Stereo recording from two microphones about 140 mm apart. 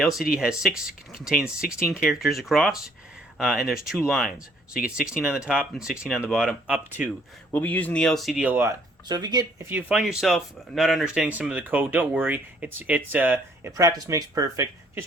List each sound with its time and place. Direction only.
0.0 s speech: 5° right (ahead or behind)
7.5 s speech: 10° left (ahead or behind)
8.4 s speech: 15° right (ahead or behind)
9.0 s speech: 30° right (ahead or behind)
9.6 s speech: 10° right (ahead or behind)